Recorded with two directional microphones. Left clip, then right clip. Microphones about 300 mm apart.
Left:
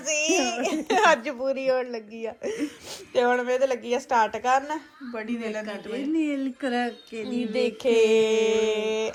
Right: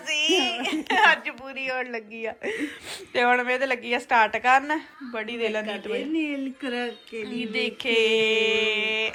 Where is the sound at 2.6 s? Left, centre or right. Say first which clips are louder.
Right 1 dB; centre.